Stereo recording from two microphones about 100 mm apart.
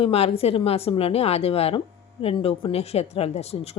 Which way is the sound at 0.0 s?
80° left.